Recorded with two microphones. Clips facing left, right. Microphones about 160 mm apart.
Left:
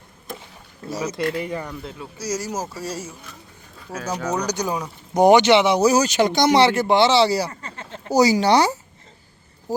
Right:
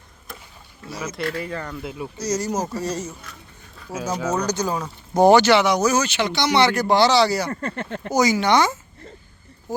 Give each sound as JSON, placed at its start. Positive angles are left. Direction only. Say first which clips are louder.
{"t": 0.9, "sound": "speech", "louder": "left 4 dB", "side_deg": 40}
{"t": 1.2, "sound": "speech", "louder": "left 1 dB", "side_deg": 20}
{"t": 1.8, "sound": "speech", "louder": "right 4 dB", "side_deg": -15}
{"t": 2.1, "sound": "speech", "louder": "right 3 dB", "side_deg": 10}
{"t": 3.8, "sound": "speech", "louder": "right 1 dB", "side_deg": -10}
{"t": 4.4, "sound": "speech", "louder": "right 1 dB", "side_deg": 15}
{"t": 7.5, "sound": "speech", "louder": "right 9 dB", "side_deg": -60}
{"t": 8.1, "sound": "speech", "louder": "left 2 dB", "side_deg": 35}